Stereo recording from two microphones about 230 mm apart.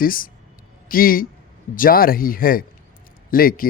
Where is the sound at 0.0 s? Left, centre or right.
Left.